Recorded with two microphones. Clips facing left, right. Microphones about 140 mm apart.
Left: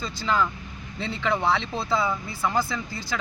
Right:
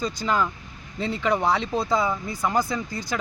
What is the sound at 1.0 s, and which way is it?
Speech, 40° right (ahead or behind).